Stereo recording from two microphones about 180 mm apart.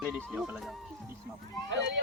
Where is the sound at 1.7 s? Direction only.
75° right (ahead or behind).